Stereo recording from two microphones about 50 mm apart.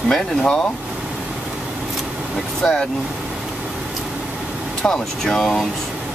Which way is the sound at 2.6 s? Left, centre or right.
Centre.